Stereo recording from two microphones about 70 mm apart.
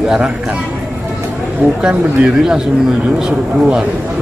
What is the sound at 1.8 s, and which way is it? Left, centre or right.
A man's voice, centre.